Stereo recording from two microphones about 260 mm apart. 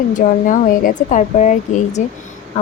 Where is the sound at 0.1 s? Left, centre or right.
Left.